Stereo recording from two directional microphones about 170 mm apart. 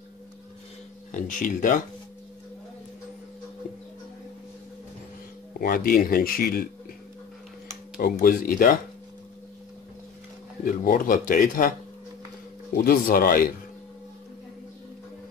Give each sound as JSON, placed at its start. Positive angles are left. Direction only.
{"t": 1.1, "sound": "speech", "side_deg": 50}
{"t": 5.6, "sound": "speech", "side_deg": 60}
{"t": 8.0, "sound": "speech", "side_deg": 55}
{"t": 10.6, "sound": "speech", "side_deg": 55}
{"t": 12.7, "sound": "speech", "side_deg": 60}